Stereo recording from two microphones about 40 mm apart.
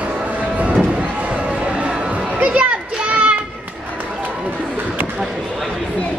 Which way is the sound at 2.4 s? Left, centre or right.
Right.